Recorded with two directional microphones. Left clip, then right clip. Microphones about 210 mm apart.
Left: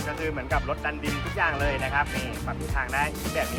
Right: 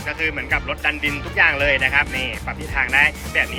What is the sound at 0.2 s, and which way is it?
Speech, 10° left (ahead or behind).